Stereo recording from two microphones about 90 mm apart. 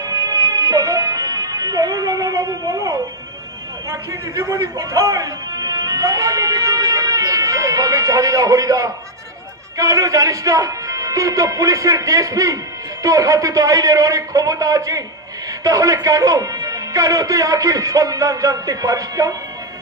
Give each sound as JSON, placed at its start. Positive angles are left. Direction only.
{"t": 0.0, "sound": "music", "side_deg": -40}
{"t": 3.9, "sound": "a man's voice", "side_deg": -35}